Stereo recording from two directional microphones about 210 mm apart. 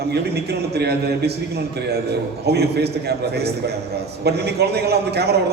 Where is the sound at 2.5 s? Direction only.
50° right (ahead or behind).